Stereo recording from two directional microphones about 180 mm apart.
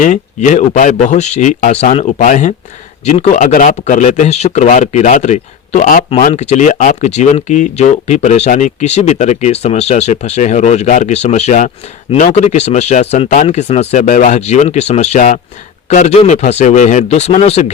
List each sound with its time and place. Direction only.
0.0 s speech: 45° left (ahead or behind)